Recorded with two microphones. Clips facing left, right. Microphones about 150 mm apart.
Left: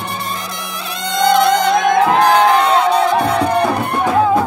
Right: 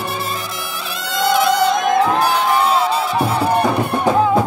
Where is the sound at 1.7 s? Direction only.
90° left.